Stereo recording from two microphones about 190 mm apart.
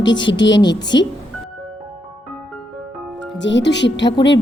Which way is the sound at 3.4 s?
70° left (ahead or behind).